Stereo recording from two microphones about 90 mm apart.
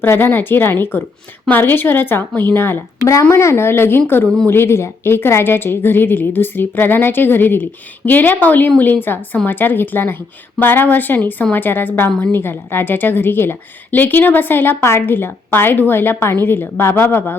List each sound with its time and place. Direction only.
0.0 s a woman's voice: 25° left (ahead or behind)